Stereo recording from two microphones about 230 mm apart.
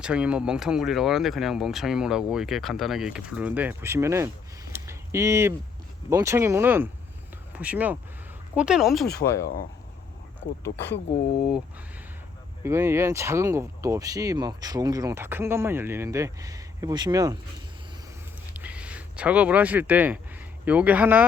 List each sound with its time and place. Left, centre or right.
0.0 s speech: centre
9.4 s speech: left
10.4 s speech: left
12.6 s speech: centre
18.5 s a sound: centre
20.7 s speech: centre